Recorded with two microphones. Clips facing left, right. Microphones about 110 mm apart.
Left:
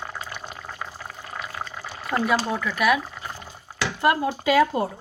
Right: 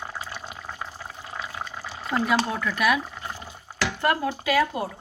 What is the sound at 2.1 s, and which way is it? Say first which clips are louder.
Speech: left 1 dB; centre (ahead or behind).